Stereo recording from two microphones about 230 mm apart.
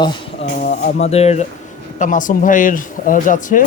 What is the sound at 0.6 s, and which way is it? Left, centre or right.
Speech, left.